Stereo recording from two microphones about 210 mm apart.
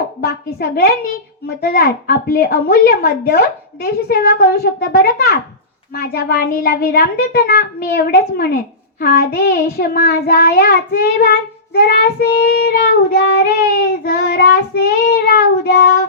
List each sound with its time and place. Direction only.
0.2 s child singing: 45° left (ahead or behind)